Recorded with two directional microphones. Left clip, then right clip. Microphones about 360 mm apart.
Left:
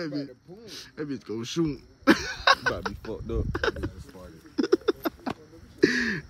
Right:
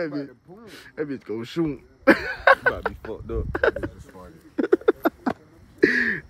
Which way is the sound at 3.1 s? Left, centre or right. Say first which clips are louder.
Right 2 dB; left.